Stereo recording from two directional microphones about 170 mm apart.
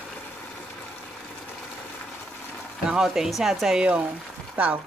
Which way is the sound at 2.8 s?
5° right (ahead or behind).